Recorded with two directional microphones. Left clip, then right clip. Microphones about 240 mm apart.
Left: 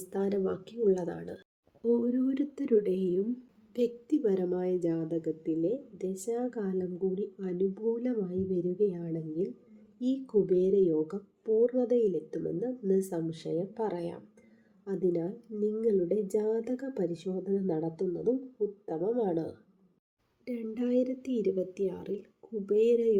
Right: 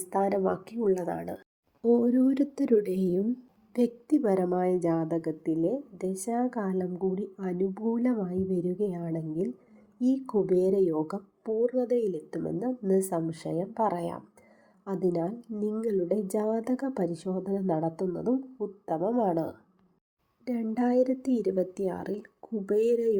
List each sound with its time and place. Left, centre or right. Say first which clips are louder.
0.0 s a woman's voice: right 5 dB; centre
20.7 s speech: right 4 dB; centre